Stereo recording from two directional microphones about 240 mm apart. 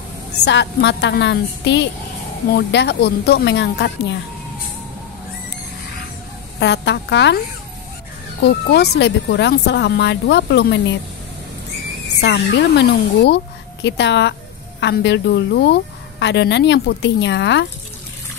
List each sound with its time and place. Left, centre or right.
0.4 s a woman's voice: left
6.6 s a woman's voice: left
8.4 s a woman's voice: left
12.2 s a woman's voice: left